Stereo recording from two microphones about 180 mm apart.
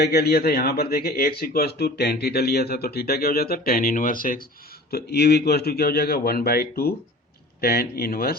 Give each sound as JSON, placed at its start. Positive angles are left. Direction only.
{"t": 0.0, "sound": "a man's voice", "side_deg": 60}
{"t": 4.9, "sound": "a man's voice", "side_deg": 60}